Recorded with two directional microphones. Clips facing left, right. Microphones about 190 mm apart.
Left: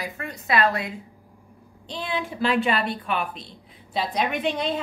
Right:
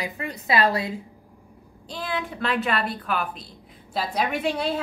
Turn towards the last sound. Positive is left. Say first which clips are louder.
# even
turn(degrees=-5)  # may be behind; listen again after turning